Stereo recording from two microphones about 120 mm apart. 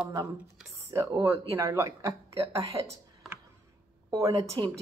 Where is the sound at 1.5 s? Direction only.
25° right (ahead or behind).